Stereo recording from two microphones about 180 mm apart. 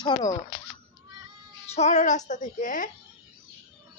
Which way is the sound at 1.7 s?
40° left (ahead or behind).